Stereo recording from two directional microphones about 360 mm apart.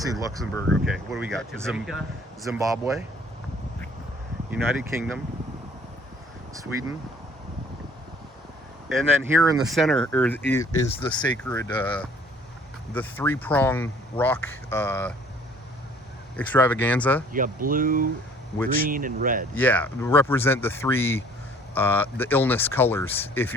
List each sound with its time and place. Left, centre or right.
0.0 s speech: centre
4.5 s speech: centre
9.2 s speech: centre
16.4 s speech: centre
17.3 s speech: right
19.5 s speech: centre